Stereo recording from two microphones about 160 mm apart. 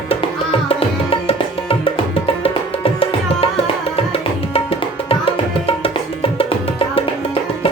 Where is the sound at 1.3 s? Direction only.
35° left (ahead or behind).